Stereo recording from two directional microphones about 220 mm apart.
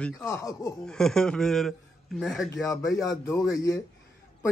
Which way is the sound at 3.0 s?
15° left (ahead or behind).